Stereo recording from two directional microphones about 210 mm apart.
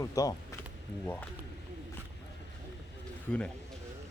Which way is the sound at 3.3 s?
5° left (ahead or behind).